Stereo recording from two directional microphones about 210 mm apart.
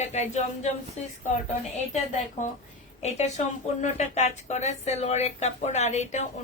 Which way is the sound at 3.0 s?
30° left (ahead or behind).